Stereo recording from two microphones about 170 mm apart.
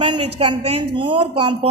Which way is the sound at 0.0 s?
35° right (ahead or behind).